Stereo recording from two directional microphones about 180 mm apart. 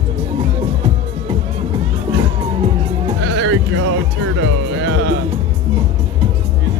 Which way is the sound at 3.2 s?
75° right (ahead or behind).